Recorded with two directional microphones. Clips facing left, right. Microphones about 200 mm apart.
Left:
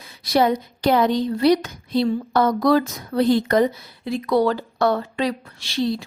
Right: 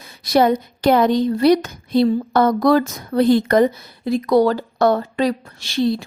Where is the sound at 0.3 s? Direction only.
50° right (ahead or behind).